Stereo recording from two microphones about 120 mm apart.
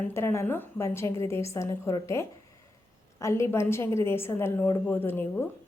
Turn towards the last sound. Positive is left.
turn(degrees=15)  # may be behind; listen again after turning